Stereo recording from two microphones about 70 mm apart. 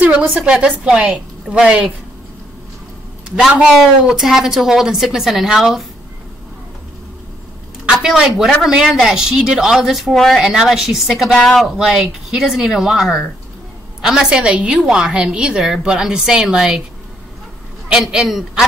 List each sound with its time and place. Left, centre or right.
0.2 s speech: centre
0.6 s a woman's voice: centre
4.0 s speech: centre
7.8 s a woman's voice: centre
17.8 s a woman's voice: centre